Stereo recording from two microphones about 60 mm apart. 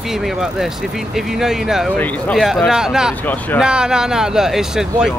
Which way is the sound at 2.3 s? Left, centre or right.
Centre.